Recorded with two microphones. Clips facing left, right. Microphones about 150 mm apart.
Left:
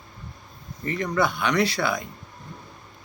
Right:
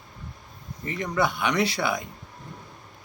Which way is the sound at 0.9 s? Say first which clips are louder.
Left 2 dB; 15° right (ahead or behind).